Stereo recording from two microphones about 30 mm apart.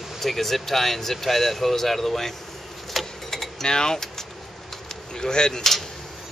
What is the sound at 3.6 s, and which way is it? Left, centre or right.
Speech, left.